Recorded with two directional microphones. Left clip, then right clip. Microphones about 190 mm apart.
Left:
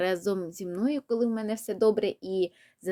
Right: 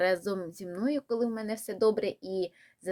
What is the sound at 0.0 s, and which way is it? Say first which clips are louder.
A woman's voice: even; 35° left (ahead or behind).